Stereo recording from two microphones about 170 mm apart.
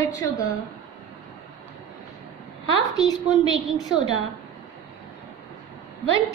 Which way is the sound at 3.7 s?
25° left (ahead or behind).